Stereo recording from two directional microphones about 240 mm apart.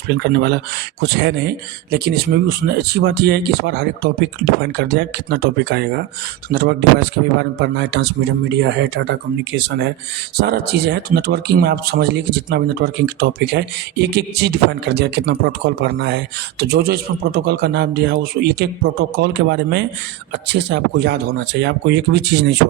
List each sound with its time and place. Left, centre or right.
0.3 s speech: right